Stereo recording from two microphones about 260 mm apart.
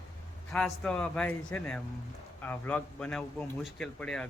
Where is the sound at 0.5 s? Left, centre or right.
Centre.